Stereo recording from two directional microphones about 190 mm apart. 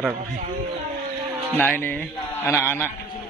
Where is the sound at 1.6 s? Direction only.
10° left (ahead or behind).